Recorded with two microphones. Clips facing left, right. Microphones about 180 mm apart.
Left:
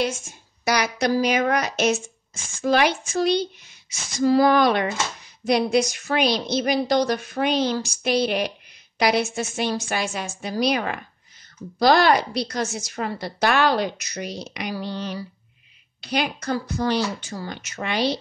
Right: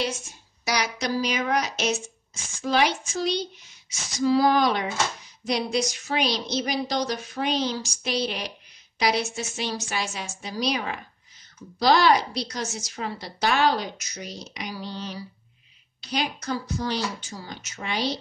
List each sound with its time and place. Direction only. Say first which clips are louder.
0.0 s a woman's voice: left 4 dB; 50° left (ahead or behind)